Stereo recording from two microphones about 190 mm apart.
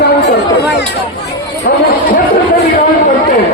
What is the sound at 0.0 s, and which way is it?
Chatter, 60° left (ahead or behind).